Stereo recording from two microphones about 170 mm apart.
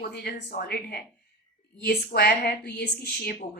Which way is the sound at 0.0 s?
75° left (ahead or behind).